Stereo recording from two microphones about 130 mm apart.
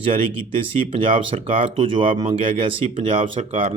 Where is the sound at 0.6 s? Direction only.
45° right (ahead or behind).